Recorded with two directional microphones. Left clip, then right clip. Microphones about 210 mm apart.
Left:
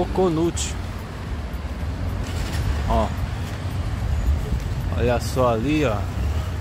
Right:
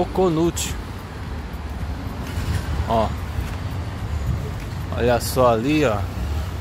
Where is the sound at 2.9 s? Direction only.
15° right (ahead or behind).